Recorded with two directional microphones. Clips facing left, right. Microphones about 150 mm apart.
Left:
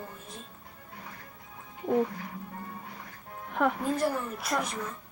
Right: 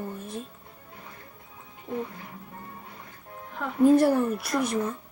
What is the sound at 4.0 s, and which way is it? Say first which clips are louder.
Speech: right 8 dB; 65° right (ahead or behind).